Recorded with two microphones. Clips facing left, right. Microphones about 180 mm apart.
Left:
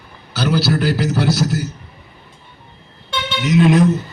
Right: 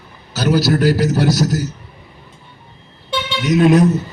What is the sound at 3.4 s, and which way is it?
Speech, 40° right (ahead or behind).